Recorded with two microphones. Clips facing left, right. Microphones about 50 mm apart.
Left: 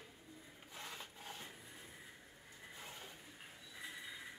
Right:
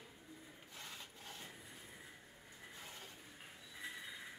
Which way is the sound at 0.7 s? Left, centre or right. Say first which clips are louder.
Left 3 dB; centre.